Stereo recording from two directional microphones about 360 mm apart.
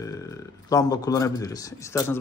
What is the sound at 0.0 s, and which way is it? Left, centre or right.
Speech, centre.